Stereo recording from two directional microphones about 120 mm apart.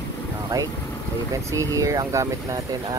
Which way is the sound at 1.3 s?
25° right (ahead or behind).